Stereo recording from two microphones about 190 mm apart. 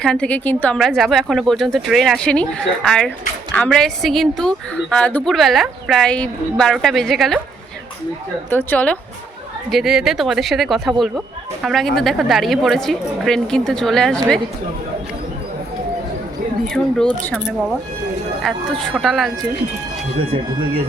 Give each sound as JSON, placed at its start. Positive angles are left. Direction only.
{"t": 0.0, "sound": "a woman's voice", "side_deg": 5}
{"t": 8.4, "sound": "a woman's voice", "side_deg": 10}
{"t": 16.6, "sound": "a woman's voice", "side_deg": 5}
{"t": 20.1, "sound": "speech", "side_deg": -30}